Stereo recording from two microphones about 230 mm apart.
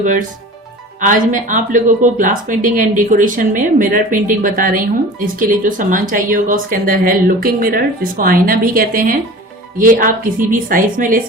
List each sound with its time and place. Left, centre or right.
0.0 s speech: right